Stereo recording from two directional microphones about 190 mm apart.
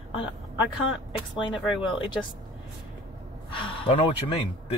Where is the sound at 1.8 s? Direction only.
25° left (ahead or behind).